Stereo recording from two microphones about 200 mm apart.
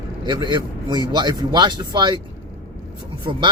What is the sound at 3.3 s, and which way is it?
Speech, 25° right (ahead or behind).